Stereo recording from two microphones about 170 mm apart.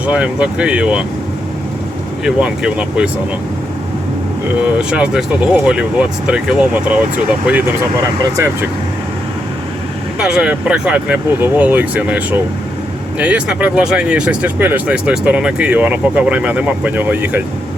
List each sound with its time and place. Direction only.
0.0 s speech: 5° right (ahead or behind)
2.2 s speech: 5° right (ahead or behind)
4.6 s speech: 5° right (ahead or behind)
8.2 s speech: 15° right (ahead or behind)
10.2 s speech: 5° right (ahead or behind)